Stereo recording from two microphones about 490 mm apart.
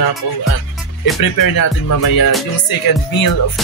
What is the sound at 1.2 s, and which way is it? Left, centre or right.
Music, left.